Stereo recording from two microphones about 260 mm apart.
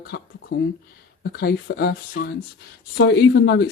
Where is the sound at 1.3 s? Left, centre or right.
Left.